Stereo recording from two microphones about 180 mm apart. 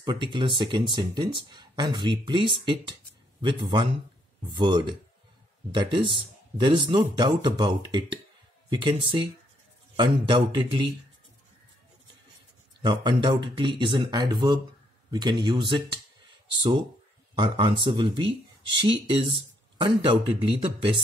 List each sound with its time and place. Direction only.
0.0 s speech: 25° right (ahead or behind)
12.8 s speech: 25° right (ahead or behind)
17.4 s speech: 25° right (ahead or behind)